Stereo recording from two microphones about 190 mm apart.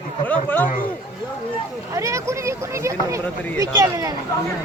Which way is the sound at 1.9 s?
15° right (ahead or behind).